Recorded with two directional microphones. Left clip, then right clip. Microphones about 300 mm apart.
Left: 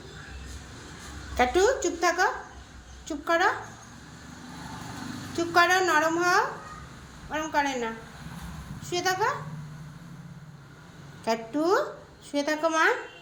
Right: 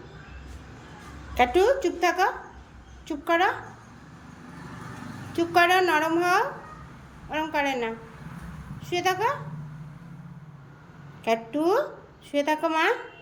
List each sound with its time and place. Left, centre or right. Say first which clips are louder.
1.4 s a woman's voice: right 2 dB; centre
5.3 s a woman's voice: right 2 dB; centre
8.9 s a woman's voice: right 2 dB; centre
11.3 s a woman's voice: right 1 dB; centre